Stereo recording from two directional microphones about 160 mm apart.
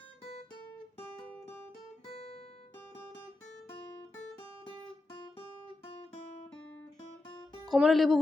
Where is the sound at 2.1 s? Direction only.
40° left (ahead or behind).